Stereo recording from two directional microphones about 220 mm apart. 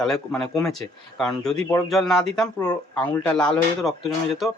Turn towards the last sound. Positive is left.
turn(degrees=0)  # may be behind; listen again after turning